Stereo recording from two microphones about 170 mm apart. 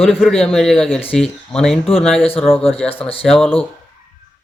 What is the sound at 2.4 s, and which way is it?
Speech, 35° left (ahead or behind).